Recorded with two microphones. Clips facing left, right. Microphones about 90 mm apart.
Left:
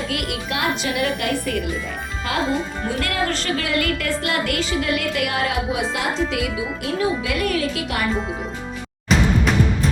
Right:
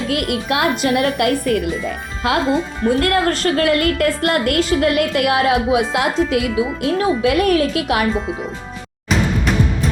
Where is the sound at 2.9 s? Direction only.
45° right (ahead or behind).